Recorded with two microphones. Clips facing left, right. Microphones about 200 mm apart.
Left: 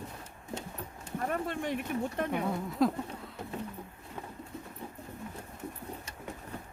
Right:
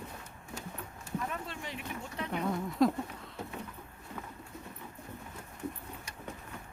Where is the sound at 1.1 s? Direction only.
50° left (ahead or behind).